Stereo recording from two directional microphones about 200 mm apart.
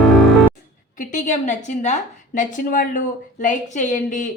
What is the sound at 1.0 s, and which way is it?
A woman's voice, 40° left (ahead or behind).